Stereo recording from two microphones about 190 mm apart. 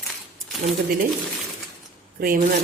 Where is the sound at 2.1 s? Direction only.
50° right (ahead or behind).